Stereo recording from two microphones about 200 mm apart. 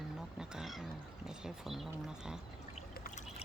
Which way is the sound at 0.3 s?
5° right (ahead or behind).